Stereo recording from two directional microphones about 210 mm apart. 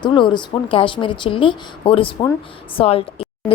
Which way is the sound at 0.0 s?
20° left (ahead or behind).